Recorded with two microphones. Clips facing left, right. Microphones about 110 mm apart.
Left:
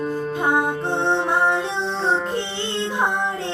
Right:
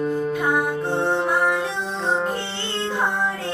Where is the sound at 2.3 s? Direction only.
20° left (ahead or behind).